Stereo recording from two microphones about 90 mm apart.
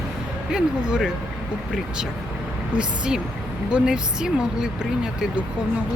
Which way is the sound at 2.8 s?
10° right (ahead or behind).